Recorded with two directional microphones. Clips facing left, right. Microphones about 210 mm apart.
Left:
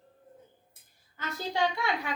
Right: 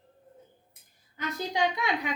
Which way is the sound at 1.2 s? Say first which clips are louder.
Right 1 dB; 15° right (ahead or behind).